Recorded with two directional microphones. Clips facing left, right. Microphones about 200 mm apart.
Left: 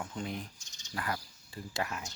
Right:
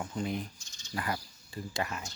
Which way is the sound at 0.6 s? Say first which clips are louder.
Right 2 dB; 15° left (ahead or behind).